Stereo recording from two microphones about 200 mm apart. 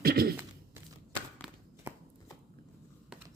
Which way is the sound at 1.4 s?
5° right (ahead or behind).